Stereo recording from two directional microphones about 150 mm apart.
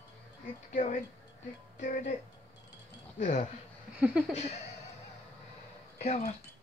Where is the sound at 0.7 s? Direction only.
55° left (ahead or behind).